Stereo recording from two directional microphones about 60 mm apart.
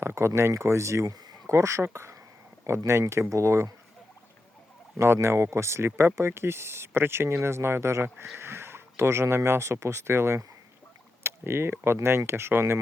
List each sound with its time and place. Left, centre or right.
0.0 s speech: right
4.9 s speech: right
11.2 s a sound: right
12.0 s speech: right